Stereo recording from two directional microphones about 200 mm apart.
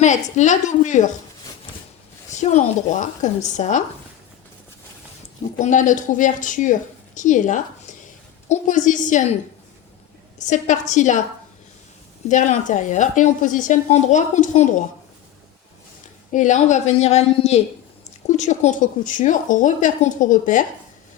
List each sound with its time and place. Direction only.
0.0 s a woman's voice: 35° left (ahead or behind)
2.3 s a woman's voice: 35° left (ahead or behind)
5.5 s a woman's voice: 40° left (ahead or behind)
10.3 s a woman's voice: 40° left (ahead or behind)
12.3 s a woman's voice: 40° left (ahead or behind)
16.3 s a woman's voice: 40° left (ahead or behind)